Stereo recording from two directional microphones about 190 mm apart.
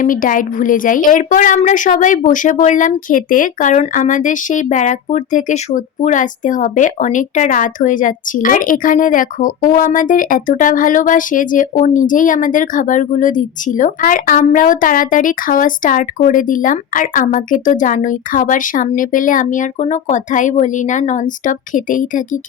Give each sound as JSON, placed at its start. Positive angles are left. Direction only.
{"t": 0.0, "sound": "a woman's voice", "side_deg": 45}